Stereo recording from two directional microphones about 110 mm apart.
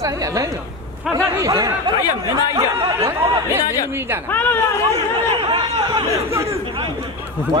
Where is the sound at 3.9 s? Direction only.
20° right (ahead or behind).